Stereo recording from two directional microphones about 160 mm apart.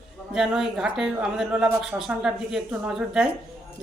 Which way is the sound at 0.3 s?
5° right (ahead or behind).